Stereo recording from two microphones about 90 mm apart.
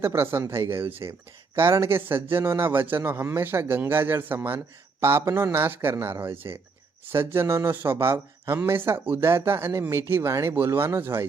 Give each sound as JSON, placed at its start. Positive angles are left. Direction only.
{"t": 0.0, "sound": "a man's voice", "side_deg": -30}